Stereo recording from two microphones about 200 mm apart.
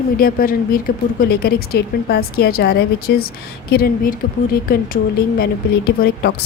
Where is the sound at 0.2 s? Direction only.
45° left (ahead or behind).